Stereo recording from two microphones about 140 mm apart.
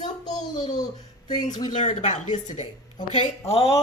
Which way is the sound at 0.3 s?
60° left (ahead or behind).